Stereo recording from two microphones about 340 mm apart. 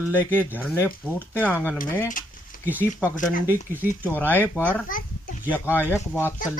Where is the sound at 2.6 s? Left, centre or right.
Centre.